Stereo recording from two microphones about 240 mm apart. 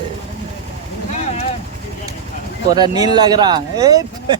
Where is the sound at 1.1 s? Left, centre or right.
Left.